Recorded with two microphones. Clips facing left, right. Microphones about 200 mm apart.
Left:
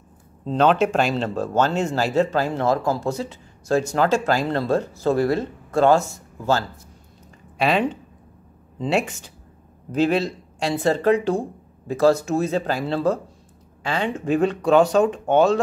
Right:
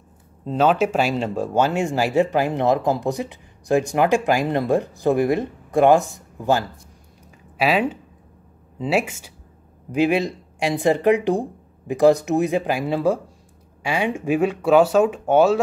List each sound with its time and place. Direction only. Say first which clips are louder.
0.5 s speech: even; 5° right (ahead or behind)
7.5 s speech: right 1 dB; 5° right (ahead or behind)